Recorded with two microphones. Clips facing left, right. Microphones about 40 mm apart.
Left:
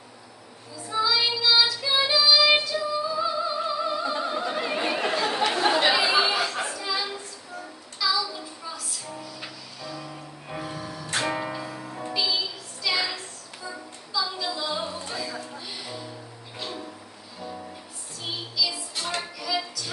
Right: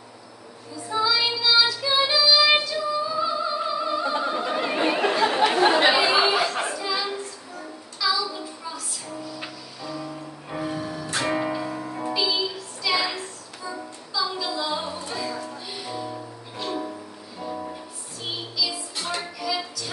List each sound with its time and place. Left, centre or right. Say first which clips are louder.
0.8 s music: right 1 dB; centre
4.0 s opera: right 2 dB; centre
4.6 s chatter: right 4 dB; centre; by 5.9 s right
5.9 s chatter: right 3 dB; centre
6.7 s a sound: right 2 dB; centre
8.0 s child singing: right 1 dB; centre
10.5 s music: right 5 dB; centre
11.6 s music: right 5 dB; right
12.2 s music: right 1 dB; centre
17.4 s music: right 5 dB; right
18.6 s music: left 1 dB; centre